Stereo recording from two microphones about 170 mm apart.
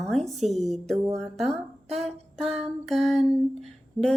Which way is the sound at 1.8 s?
40° right (ahead or behind).